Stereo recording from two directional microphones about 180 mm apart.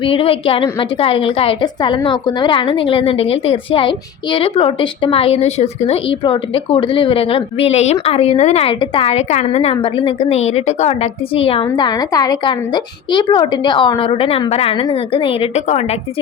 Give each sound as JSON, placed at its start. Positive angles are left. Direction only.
{"t": 0.0, "sound": "a woman's voice", "side_deg": 30}